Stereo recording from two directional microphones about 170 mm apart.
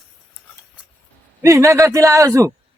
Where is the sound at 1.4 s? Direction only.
15° right (ahead or behind).